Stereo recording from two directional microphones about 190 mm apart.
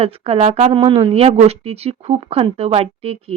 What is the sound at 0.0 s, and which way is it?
A woman's voice, 30° right (ahead or behind).